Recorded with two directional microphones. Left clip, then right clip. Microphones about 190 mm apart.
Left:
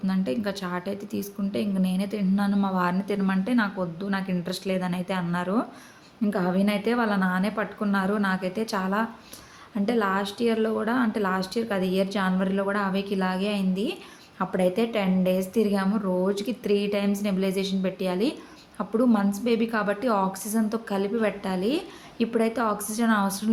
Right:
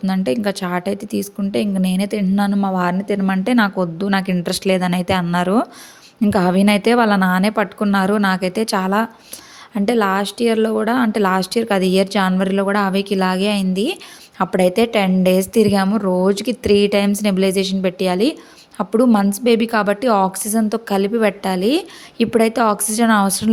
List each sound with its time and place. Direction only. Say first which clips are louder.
0.0 s a woman's voice: right 9 dB; 45° right (ahead or behind)